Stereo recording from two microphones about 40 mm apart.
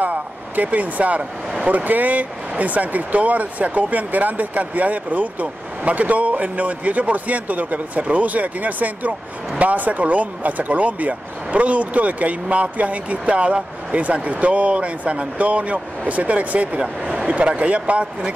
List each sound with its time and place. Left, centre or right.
0.0 s speech: right